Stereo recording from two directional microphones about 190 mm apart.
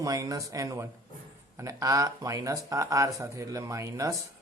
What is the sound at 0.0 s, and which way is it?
Speech, 20° right (ahead or behind).